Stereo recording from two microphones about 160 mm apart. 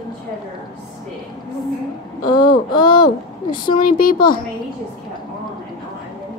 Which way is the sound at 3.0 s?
30° left (ahead or behind).